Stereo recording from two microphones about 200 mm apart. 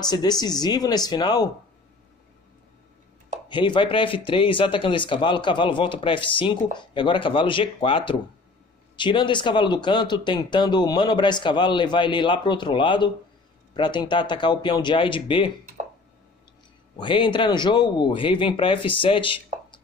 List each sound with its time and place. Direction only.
0.0 s speech: 20° left (ahead or behind)
3.4 s speech: 25° left (ahead or behind)
16.9 s speech: 25° left (ahead or behind)